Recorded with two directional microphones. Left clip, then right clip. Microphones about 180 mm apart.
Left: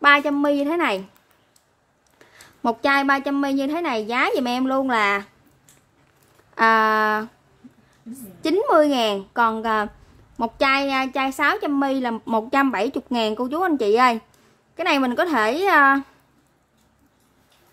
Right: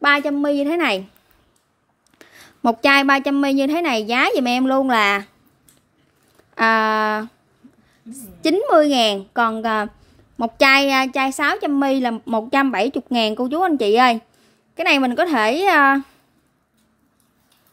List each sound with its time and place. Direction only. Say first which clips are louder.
0.0 s a woman's voice: left 1 dB; 15° right (ahead or behind)
2.1 s a woman's voice: right 3 dB; 30° right (ahead or behind)
6.5 s a woman's voice: even; 20° right (ahead or behind)
8.5 s a woman's voice: right 2 dB; 20° right (ahead or behind)
12.3 s a woman's voice: even; 15° right (ahead or behind)